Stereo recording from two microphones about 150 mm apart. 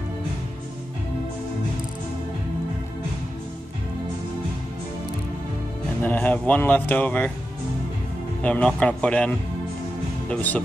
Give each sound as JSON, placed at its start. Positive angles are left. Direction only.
{"t": 6.0, "sound": "speech", "side_deg": 10}
{"t": 8.4, "sound": "speech", "side_deg": 10}
{"t": 10.3, "sound": "speech", "side_deg": 10}